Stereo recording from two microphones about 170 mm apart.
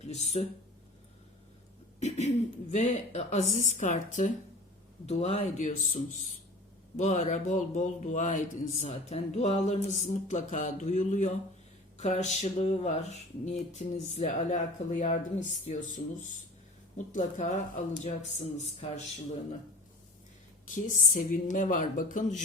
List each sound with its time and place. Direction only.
0.0 s speech: 40° left (ahead or behind)
2.0 s speech: 40° left (ahead or behind)
17.1 s speech: 45° left (ahead or behind)
21.1 s speech: 50° left (ahead or behind)